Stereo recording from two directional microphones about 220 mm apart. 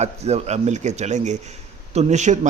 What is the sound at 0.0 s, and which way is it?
A man's voice, 30° right (ahead or behind).